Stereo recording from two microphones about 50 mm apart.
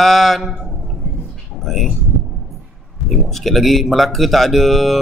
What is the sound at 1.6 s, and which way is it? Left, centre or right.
Speech, centre.